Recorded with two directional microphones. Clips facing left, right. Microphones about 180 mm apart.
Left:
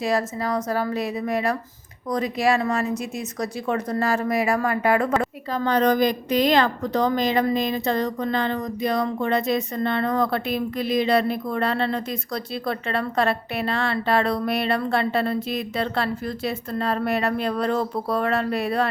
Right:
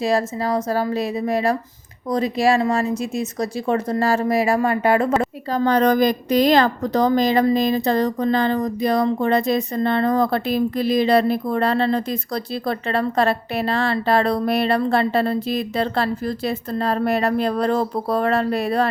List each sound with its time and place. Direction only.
0.0 s speech: 30° right (ahead or behind)
5.5 s a woman's voice: 40° right (ahead or behind)